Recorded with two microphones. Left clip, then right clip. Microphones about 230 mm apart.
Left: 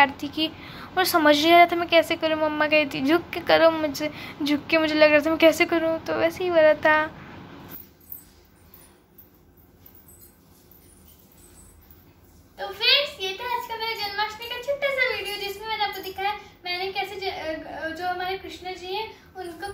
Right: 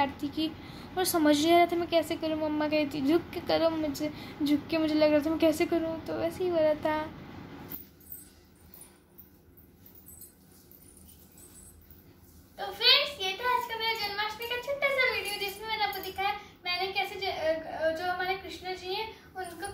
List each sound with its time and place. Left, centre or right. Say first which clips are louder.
0.0 s a woman's voice: left 9 dB; centre
12.5 s child singing: left 3 dB; centre